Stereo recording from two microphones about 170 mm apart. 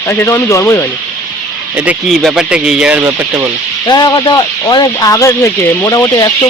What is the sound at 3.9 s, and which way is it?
Speech, 25° left (ahead or behind).